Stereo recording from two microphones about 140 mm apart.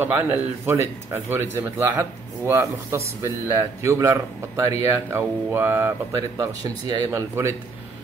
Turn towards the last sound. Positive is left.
turn(degrees=-20)  # may be behind; listen again after turning